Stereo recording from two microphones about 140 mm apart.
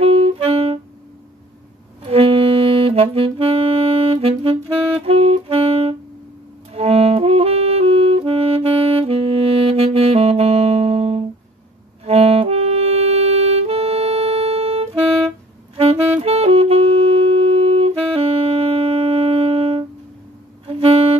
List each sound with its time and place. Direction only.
0.0 s music: 45° right (ahead or behind)
2.0 s saxophone: 45° right (ahead or behind)
6.7 s music: 45° right (ahead or behind)
15.7 s saxophone: 45° right (ahead or behind)
20.6 s music: 45° right (ahead or behind)